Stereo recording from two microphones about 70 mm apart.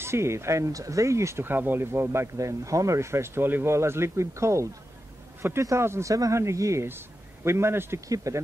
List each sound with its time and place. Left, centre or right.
0.0 s speech: right
1.4 s speech: right
2.3 s speech: right
6.9 s speech: right
8.1 s speech: right